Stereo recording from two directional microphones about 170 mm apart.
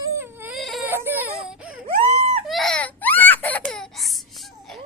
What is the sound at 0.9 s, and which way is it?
Baby cry, 10° right (ahead or behind).